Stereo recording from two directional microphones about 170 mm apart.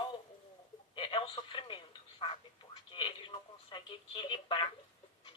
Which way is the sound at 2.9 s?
30° left (ahead or behind).